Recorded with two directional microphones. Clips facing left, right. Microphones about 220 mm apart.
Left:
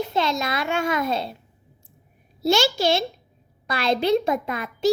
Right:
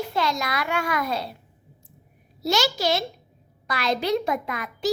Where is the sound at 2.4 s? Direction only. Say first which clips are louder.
Left 4 dB; 25° left (ahead or behind).